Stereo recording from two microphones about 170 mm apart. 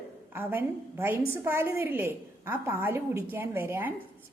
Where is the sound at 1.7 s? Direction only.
10° right (ahead or behind).